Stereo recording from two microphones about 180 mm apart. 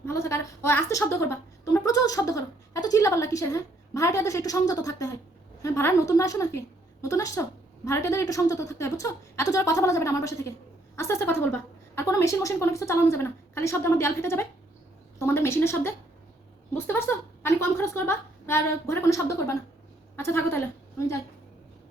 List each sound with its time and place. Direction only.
0.0 s a woman's voice: 15° left (ahead or behind)